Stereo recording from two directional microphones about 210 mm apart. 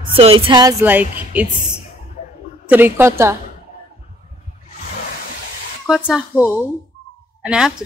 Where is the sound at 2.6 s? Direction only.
10° right (ahead or behind).